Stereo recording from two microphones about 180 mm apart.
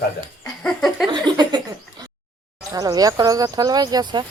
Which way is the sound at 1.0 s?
25° right (ahead or behind).